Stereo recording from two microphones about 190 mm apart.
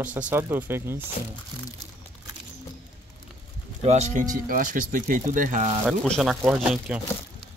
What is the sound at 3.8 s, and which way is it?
Speech, 35° right (ahead or behind).